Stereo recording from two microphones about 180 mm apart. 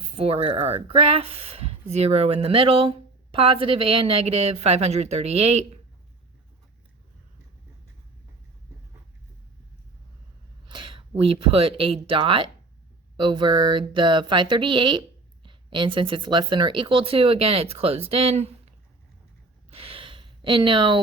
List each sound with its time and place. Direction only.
0.2 s speech: 35° right (ahead or behind)
10.7 s speech: 25° right (ahead or behind)
19.7 s a sound: 30° right (ahead or behind)